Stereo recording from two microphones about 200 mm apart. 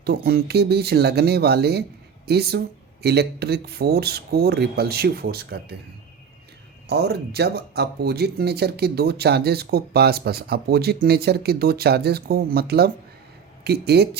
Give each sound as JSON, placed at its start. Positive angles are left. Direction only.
{"t": 0.0, "sound": "speech", "side_deg": -50}
{"t": 6.8, "sound": "speech", "side_deg": -55}